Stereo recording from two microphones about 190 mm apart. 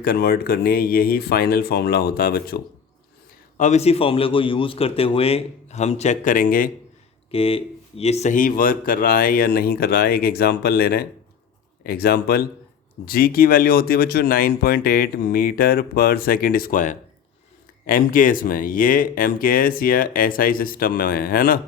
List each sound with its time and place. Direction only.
0.0 s speech: 55° left (ahead or behind)
3.6 s a man's voice: 35° left (ahead or behind)
7.3 s speech: 30° left (ahead or behind); by 21.6 s 50° left (ahead or behind)